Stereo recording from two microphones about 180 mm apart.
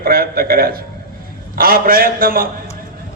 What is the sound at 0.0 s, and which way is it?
A man's voice, 55° right (ahead or behind).